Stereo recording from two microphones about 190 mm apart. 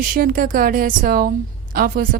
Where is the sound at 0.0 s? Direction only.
50° right (ahead or behind).